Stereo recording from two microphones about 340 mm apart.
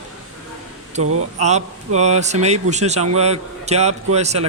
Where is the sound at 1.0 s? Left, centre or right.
Right.